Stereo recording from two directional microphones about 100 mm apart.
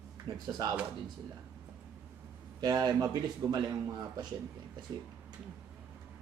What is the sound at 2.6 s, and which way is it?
Speech, 45° right (ahead or behind).